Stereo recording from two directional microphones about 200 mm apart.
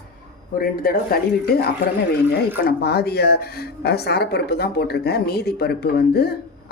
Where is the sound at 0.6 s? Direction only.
45° left (ahead or behind).